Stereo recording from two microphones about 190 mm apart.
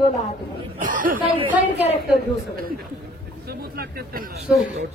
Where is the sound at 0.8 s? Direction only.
45° right (ahead or behind).